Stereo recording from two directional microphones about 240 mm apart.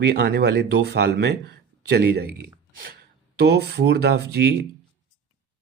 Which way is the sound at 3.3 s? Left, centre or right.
Right.